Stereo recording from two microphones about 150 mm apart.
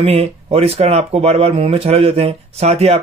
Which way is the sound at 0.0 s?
40° right (ahead or behind).